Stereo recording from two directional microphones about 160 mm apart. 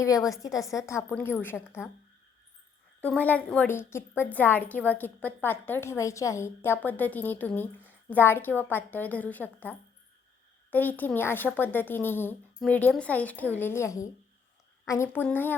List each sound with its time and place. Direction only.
0.0 s a woman's voice: 20° left (ahead or behind)
3.0 s a woman's voice: 10° left (ahead or behind)